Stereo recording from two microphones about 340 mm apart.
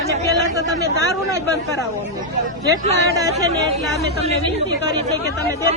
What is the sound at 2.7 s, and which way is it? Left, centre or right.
Speech, centre.